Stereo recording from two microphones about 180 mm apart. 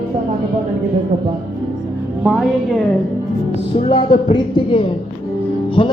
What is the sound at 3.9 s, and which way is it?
A woman's voice, 25° left (ahead or behind).